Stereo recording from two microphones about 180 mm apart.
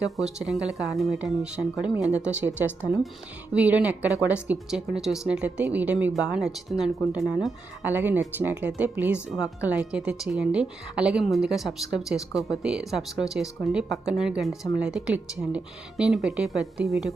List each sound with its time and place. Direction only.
0.2 s speech: centre (ahead or behind)